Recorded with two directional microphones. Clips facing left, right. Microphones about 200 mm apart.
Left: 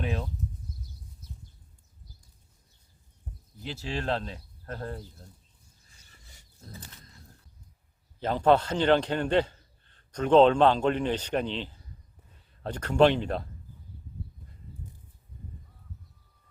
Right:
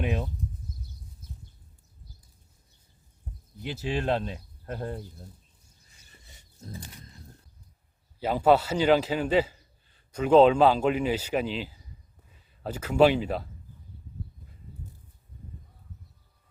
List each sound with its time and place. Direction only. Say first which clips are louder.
0.0 s a sound: right 3 dB; 15° right (ahead or behind)
3.6 s a man's voice: right 4 dB; 15° right (ahead or behind)
6.1 s wild animals: right 3 dB; 20° right (ahead or behind)
8.2 s a man's voice: right 1 dB; 10° right (ahead or behind)